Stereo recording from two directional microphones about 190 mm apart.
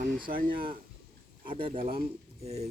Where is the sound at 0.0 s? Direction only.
45° right (ahead or behind).